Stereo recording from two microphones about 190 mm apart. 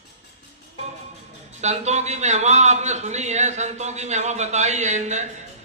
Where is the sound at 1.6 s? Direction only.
35° right (ahead or behind).